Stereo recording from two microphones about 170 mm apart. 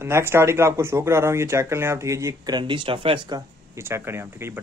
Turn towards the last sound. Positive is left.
turn(degrees=-15)  # may be behind; listen again after turning